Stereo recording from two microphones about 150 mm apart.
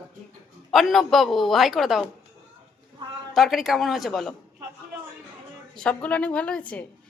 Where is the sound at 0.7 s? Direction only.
Centre (ahead or behind).